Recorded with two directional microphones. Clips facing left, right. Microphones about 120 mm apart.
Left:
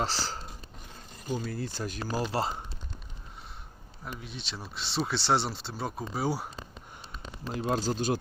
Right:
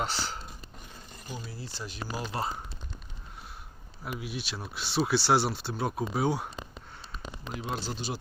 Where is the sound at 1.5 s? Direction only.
50° left (ahead or behind); by 2.6 s 30° left (ahead or behind).